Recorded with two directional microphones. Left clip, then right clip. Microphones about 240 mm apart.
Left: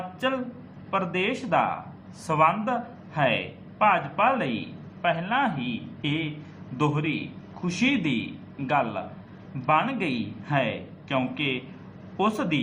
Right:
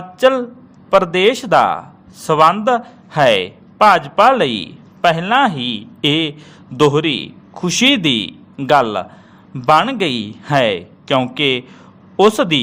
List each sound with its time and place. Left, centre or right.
0.2 s speech: right
6.7 s a man's voice: right